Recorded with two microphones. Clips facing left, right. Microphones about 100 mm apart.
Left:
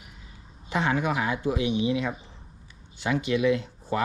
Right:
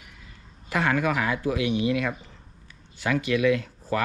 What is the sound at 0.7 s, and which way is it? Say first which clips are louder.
Speech: right 1 dB; 60° right (ahead or behind).